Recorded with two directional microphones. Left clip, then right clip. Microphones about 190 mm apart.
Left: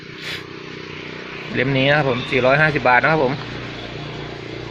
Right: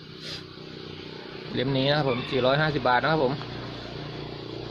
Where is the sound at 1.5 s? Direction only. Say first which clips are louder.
Left 8 dB; centre (ahead or behind).